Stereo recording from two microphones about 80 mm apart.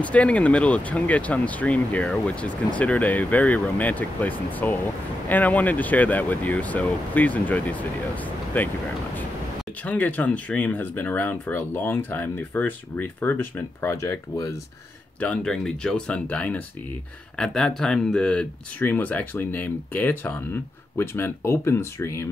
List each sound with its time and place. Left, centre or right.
0.0 s speech: centre
9.8 s speech: centre
15.1 s speech: centre
17.4 s speech: centre
18.8 s speech: left